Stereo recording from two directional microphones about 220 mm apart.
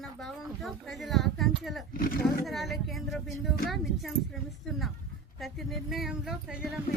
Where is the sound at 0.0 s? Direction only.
Centre (ahead or behind).